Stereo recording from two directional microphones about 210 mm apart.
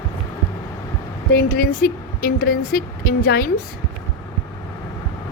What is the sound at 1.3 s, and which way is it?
A woman's voice, 45° left (ahead or behind).